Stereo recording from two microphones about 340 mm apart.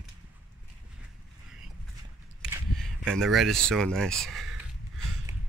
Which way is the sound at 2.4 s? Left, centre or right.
Centre.